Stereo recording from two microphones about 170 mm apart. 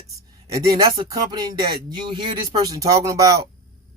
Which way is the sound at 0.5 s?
20° right (ahead or behind).